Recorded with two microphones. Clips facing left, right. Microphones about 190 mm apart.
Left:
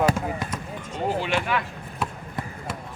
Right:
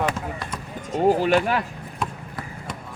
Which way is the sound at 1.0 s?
40° right (ahead or behind).